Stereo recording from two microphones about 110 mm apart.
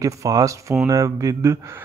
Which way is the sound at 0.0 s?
30° right (ahead or behind).